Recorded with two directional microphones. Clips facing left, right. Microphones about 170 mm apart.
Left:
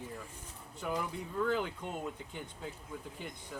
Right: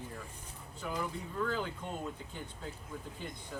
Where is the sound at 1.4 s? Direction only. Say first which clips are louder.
Left 3 dB; 15° left (ahead or behind).